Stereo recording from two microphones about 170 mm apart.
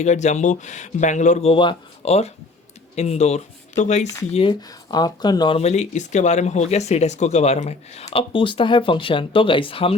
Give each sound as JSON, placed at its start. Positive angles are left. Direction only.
{"t": 0.0, "sound": "speech", "side_deg": 45}
{"t": 4.9, "sound": "speech", "side_deg": 25}
{"t": 5.5, "sound": "speech", "side_deg": 40}